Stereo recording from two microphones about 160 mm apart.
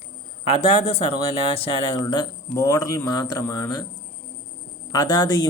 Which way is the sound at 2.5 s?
20° left (ahead or behind).